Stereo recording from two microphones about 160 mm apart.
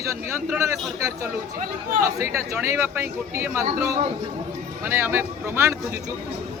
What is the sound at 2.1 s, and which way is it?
Speech, 20° right (ahead or behind).